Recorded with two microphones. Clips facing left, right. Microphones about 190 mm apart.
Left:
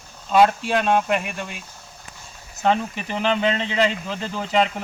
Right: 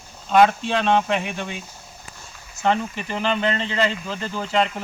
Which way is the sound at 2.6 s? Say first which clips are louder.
Left 1 dB; 15° left (ahead or behind).